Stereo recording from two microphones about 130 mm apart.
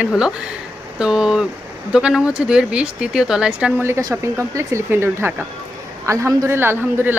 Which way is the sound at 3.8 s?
20° right (ahead or behind).